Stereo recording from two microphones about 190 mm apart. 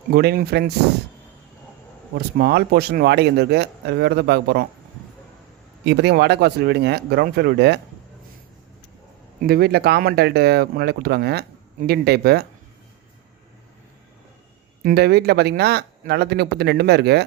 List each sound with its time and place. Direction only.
0.1 s speech: 55° right (ahead or behind)
2.4 s speech: 55° right (ahead or behind)
5.8 s speech: 65° right (ahead or behind)
9.4 s speech: 55° right (ahead or behind)
14.8 s speech: 60° right (ahead or behind)